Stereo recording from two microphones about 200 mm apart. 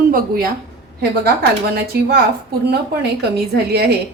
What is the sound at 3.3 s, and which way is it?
Speech, 55° right (ahead or behind).